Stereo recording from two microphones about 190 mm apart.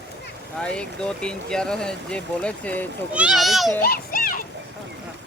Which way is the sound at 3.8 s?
55° left (ahead or behind).